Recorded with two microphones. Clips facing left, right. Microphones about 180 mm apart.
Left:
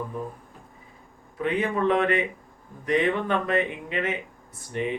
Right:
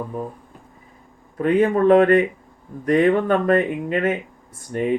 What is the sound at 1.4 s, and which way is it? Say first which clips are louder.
Speech: right 8 dB; 45° right (ahead or behind).